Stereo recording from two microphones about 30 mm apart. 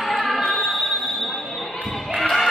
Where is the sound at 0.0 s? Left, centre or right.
Centre.